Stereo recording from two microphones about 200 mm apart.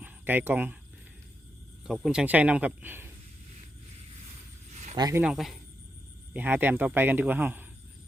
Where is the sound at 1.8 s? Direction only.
Centre (ahead or behind).